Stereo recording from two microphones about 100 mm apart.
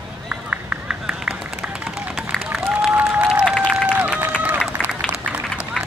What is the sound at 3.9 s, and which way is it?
Run, 15° right (ahead or behind).